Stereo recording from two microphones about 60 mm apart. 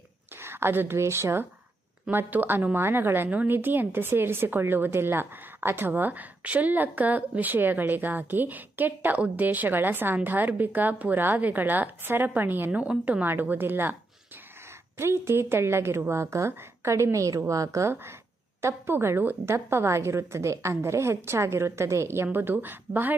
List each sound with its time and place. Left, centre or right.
0.4 s speech: right
2.0 s a woman's voice: right
15.0 s a woman's voice: right
18.6 s a woman's voice: right